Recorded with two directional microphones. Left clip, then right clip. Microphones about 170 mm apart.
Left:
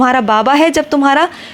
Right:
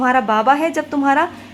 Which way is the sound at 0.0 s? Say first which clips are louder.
Left 4 dB; 30° left (ahead or behind).